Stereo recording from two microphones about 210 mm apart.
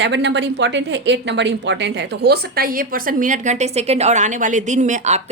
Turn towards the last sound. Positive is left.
turn(degrees=-30)  # may be behind; listen again after turning